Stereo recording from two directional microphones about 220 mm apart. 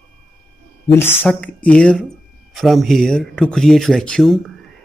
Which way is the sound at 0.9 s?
10° left (ahead or behind).